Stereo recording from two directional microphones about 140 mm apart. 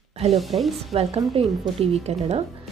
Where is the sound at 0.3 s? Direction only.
Centre (ahead or behind).